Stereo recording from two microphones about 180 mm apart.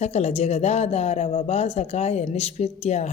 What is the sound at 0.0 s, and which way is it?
A woman's voice, 35° left (ahead or behind).